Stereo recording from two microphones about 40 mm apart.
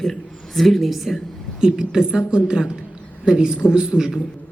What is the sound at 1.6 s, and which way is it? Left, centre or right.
A woman's voice, centre.